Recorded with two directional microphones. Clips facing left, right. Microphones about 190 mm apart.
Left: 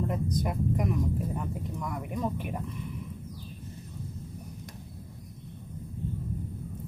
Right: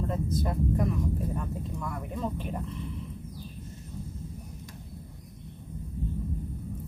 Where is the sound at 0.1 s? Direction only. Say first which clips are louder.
Even; 15° left (ahead or behind).